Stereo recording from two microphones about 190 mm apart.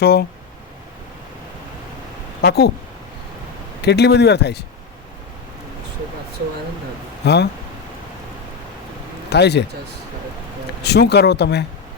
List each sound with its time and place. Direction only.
0.0 s speech: 55° left (ahead or behind)
2.4 s speech: 60° left (ahead or behind)
3.8 s speech: 60° left (ahead or behind)
7.2 s speech: 60° left (ahead or behind)
9.3 s speech: 60° left (ahead or behind)
10.8 s speech: 60° left (ahead or behind)